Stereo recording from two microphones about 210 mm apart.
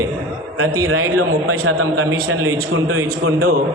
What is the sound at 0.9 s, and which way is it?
A man's voice, 85° right.